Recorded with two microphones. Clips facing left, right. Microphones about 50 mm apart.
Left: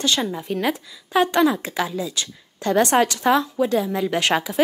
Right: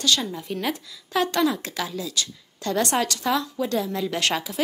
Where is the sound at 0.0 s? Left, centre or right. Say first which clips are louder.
Left 2 dB; left.